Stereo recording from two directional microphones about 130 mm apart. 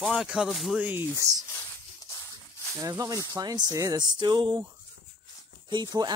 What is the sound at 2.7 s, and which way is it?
Speech, 25° right (ahead or behind).